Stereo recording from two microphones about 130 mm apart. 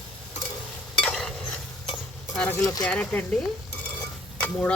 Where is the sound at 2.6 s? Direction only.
25° left (ahead or behind).